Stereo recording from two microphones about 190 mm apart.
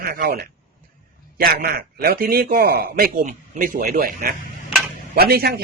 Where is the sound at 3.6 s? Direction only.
45° right (ahead or behind).